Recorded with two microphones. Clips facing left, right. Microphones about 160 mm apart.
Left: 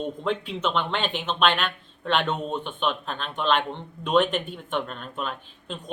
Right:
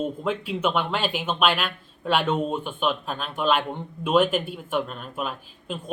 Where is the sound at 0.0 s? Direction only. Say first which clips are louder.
Right 1 dB; 5° right (ahead or behind).